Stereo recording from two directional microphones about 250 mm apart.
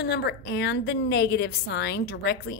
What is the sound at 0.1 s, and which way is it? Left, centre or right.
A woman's voice, left.